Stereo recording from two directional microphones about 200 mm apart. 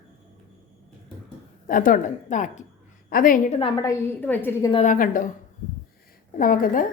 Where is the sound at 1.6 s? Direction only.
40° left (ahead or behind).